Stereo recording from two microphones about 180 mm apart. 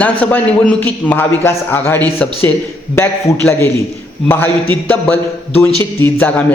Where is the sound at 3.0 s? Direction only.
15° left (ahead or behind).